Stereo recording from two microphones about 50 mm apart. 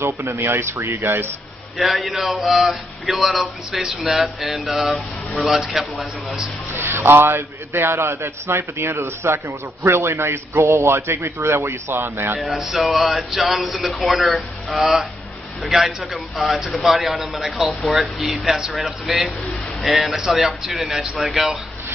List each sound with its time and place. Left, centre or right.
0.0 s a man's voice: right
1.8 s speech: centre
6.7 s a man's voice: right
12.5 s speech: centre
16.1 s speech: centre